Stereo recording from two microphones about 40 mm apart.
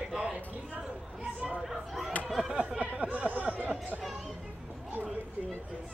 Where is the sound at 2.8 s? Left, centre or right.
Right.